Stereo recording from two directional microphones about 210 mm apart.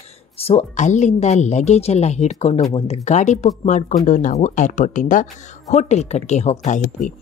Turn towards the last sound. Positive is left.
turn(degrees=35)  # may be behind; listen again after turning